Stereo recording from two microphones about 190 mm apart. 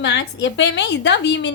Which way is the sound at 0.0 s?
65° left (ahead or behind).